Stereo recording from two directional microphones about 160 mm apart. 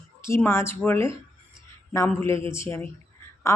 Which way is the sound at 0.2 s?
15° left (ahead or behind).